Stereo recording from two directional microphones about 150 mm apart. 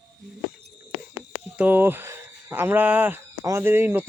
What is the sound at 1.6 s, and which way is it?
Speech, 10° right (ahead or behind).